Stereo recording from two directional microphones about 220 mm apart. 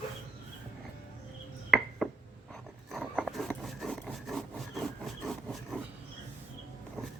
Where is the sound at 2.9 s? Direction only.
Centre (ahead or behind).